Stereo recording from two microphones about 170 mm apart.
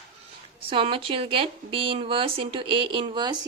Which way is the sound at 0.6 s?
30° right (ahead or behind).